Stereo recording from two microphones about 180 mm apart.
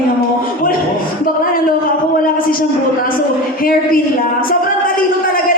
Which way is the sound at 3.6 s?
50° left (ahead or behind).